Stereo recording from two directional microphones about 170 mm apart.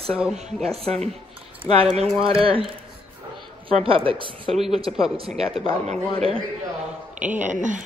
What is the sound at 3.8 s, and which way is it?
Speech, 30° right (ahead or behind).